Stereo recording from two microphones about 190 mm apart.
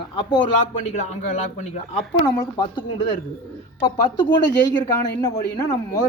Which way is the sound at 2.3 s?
20° left (ahead or behind).